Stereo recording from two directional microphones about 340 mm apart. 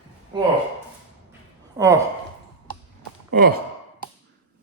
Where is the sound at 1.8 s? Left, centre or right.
Centre.